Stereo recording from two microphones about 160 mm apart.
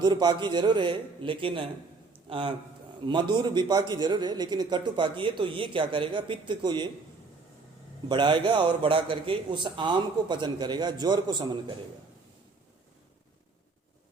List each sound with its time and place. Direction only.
0.0 s a man's voice: 30° right (ahead or behind)
8.1 s a man's voice: 30° right (ahead or behind)